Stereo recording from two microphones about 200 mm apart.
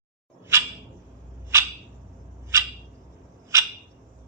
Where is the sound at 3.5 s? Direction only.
15° right (ahead or behind).